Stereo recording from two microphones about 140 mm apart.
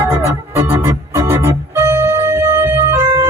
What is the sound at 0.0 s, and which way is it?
Organ, 15° right (ahead or behind).